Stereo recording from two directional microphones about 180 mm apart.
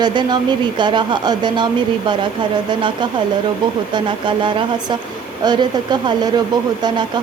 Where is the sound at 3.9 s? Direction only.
25° right (ahead or behind).